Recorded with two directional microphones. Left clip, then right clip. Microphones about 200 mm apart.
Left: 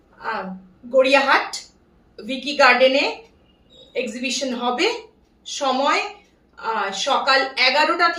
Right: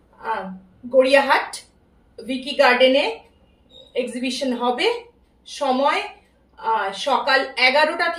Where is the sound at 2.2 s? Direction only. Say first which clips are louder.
Left 2 dB; 10° left (ahead or behind).